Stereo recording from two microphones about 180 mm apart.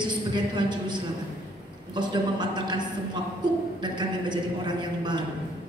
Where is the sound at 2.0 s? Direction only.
25° right (ahead or behind).